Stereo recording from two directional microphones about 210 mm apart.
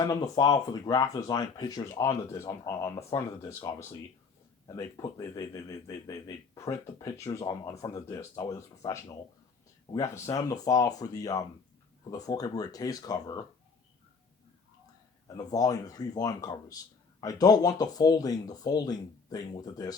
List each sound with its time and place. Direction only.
0.0 s speech: 20° left (ahead or behind)
15.4 s speech: 15° left (ahead or behind)